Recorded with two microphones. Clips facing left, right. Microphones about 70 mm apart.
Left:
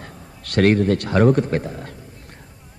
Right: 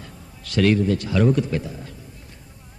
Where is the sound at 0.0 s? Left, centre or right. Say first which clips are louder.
Left 3 dB; left.